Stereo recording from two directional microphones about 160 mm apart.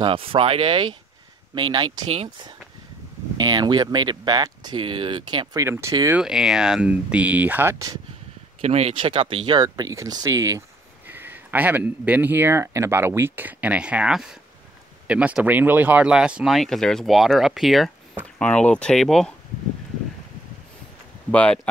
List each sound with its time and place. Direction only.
0.0 s speech: 35° right (ahead or behind)
3.3 s speech: 25° right (ahead or behind)
6.1 s speech: 5° right (ahead or behind)
8.5 s speech: 40° right (ahead or behind); by 19.3 s 5° left (ahead or behind)
21.3 s speech: 10° left (ahead or behind)